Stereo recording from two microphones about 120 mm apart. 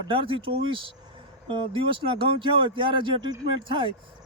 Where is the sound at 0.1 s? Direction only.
45° right (ahead or behind).